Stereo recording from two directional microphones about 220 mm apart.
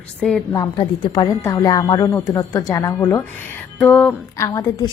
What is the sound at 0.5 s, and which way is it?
A woman's voice, 15° left (ahead or behind).